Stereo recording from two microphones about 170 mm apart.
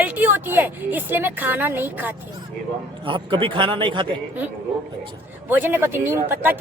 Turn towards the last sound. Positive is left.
turn(degrees=-10)  # may be behind; listen again after turning